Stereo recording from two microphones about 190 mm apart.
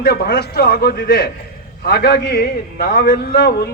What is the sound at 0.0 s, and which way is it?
A man's voice, 55° left (ahead or behind).